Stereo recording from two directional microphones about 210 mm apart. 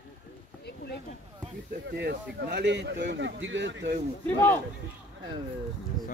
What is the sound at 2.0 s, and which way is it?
Speech, 50° right (ahead or behind).